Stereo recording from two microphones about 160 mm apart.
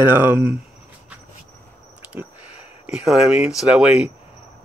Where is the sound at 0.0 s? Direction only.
10° right (ahead or behind).